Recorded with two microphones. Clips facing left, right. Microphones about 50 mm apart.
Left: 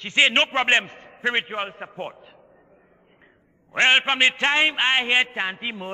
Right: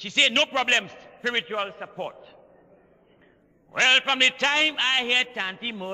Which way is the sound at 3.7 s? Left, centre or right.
Left.